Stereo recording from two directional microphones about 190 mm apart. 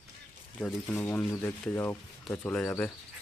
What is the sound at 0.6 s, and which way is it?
Speech, 10° left (ahead or behind).